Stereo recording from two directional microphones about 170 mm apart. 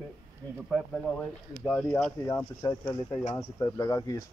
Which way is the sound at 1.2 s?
10° left (ahead or behind).